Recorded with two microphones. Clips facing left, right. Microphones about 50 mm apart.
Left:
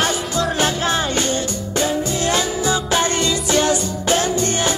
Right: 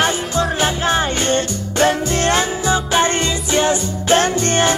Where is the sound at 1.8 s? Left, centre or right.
Right.